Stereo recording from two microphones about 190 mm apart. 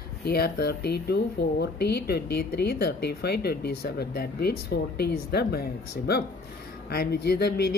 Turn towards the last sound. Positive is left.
turn(degrees=60)  # may be behind; listen again after turning